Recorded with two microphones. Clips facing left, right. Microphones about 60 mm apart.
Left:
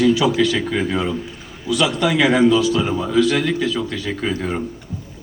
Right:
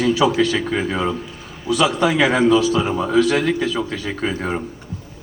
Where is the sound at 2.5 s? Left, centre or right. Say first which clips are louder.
Right 1 dB; right.